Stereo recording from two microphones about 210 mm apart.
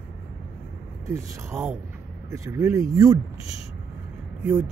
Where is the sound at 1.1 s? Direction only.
15° right (ahead or behind).